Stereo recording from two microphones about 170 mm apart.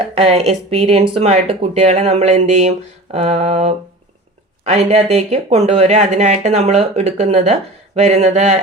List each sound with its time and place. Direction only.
0.0 s speech: 35° right (ahead or behind)